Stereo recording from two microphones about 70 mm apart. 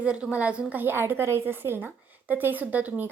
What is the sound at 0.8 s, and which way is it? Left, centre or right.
A woman's voice, right.